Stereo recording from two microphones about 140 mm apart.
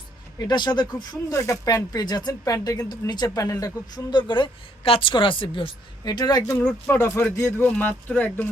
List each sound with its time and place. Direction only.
0.3 s speech: 30° left (ahead or behind)
6.6 s speech: 10° left (ahead or behind)